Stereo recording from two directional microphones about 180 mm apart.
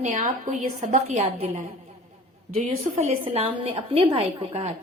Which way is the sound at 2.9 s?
35° right (ahead or behind).